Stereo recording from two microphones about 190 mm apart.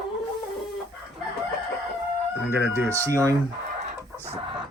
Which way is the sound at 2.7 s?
15° right (ahead or behind).